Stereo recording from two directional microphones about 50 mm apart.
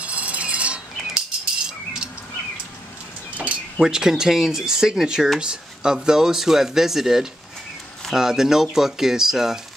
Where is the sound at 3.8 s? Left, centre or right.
Centre.